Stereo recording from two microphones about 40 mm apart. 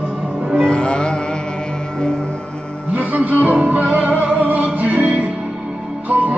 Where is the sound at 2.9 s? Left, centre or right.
Right.